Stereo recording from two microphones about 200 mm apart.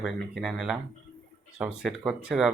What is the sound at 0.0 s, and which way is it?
Speech, centre (ahead or behind).